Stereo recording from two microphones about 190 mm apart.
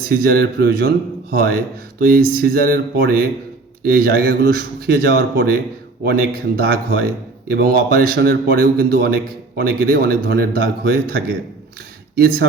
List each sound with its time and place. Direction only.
0.0 s speech: 50° right (ahead or behind)
6.6 s speech: 55° right (ahead or behind)